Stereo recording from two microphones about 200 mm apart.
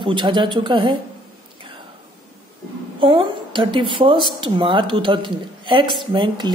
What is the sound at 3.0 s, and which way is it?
A woman's voice, 25° right (ahead or behind).